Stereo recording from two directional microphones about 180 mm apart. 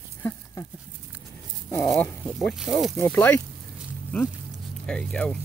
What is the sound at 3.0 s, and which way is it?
Speech, 10° left (ahead or behind).